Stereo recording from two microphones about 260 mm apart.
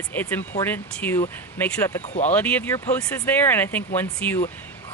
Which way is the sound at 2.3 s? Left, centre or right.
Centre.